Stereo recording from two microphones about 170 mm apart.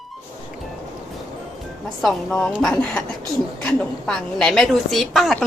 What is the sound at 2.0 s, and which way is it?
A woman's voice, centre (ahead or behind).